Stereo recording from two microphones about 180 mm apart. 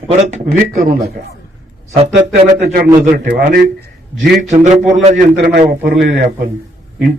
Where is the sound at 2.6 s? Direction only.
55° right (ahead or behind).